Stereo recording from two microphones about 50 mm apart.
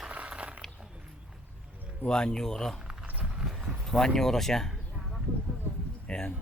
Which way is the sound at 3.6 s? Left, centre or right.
Centre.